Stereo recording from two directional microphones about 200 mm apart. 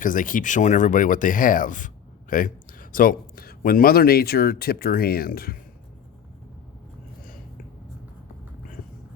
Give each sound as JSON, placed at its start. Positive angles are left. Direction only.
{"t": 0.0, "sound": "speech", "side_deg": 40}